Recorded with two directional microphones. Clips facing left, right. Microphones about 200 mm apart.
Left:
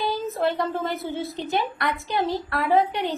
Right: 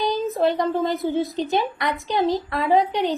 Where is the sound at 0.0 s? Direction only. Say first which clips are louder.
Right 4 dB; 15° right (ahead or behind).